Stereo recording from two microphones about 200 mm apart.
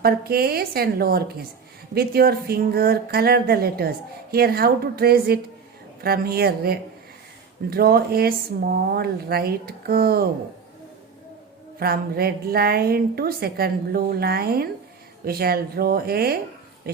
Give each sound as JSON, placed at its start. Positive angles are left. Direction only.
{"t": 0.0, "sound": "speech", "side_deg": -50}
{"t": 11.8, "sound": "speech", "side_deg": -50}